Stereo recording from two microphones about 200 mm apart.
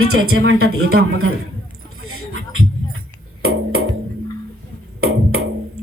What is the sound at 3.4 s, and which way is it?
Music, 90° right.